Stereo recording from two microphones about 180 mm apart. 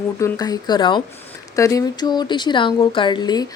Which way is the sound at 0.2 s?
20° left (ahead or behind).